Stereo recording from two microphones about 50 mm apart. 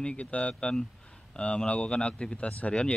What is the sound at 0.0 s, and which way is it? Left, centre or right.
Speech, left.